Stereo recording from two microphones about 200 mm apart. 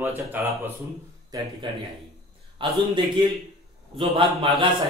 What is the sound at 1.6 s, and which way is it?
Speech, 25° right (ahead or behind).